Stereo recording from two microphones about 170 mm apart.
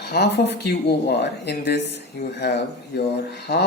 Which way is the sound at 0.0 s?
75° left (ahead or behind).